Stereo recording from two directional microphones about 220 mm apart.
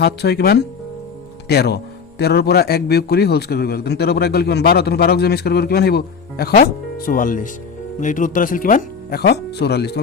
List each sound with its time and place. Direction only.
0.0 s speech: 50° left (ahead or behind)